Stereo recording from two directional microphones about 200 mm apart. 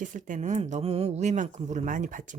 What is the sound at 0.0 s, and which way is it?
Speech, 40° right (ahead or behind).